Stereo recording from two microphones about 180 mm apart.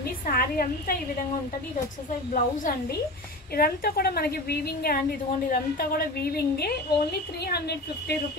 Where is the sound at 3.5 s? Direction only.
55° left (ahead or behind).